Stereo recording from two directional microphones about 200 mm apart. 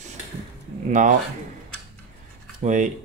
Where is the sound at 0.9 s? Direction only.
40° right (ahead or behind).